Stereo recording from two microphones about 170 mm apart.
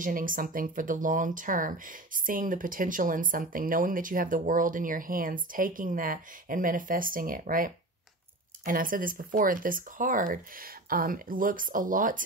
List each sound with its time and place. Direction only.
0.0 s speech: 55° right (ahead or behind)